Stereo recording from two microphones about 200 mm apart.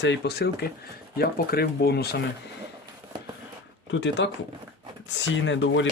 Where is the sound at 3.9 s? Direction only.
65° left (ahead or behind).